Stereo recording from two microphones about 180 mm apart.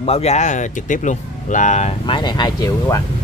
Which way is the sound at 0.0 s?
35° left (ahead or behind).